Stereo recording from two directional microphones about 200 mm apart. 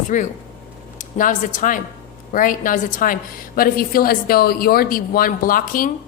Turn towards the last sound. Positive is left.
turn(degrees=45)  # may be behind; listen again after turning